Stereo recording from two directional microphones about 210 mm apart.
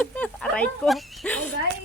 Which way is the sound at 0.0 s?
5° left (ahead or behind).